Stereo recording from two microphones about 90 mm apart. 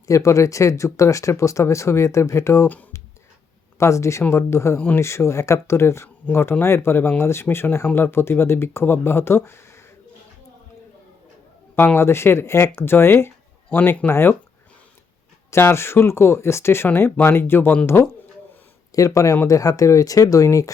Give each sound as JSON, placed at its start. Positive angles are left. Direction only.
{"t": 0.1, "sound": "speech", "side_deg": 35}
{"t": 3.8, "sound": "speech", "side_deg": 35}
{"t": 11.9, "sound": "speech", "side_deg": 30}
{"t": 15.4, "sound": "speech", "side_deg": 30}
{"t": 18.9, "sound": "speech", "side_deg": 40}